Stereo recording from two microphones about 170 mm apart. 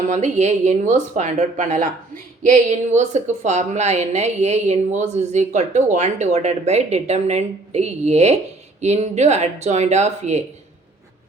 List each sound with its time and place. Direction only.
0.1 s a woman's voice: 40° right (ahead or behind)